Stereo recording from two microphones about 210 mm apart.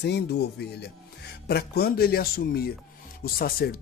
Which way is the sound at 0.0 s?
50° left (ahead or behind).